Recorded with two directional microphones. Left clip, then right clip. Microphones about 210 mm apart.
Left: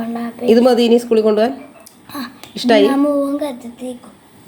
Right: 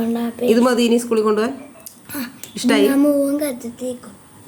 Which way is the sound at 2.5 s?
5° left (ahead or behind).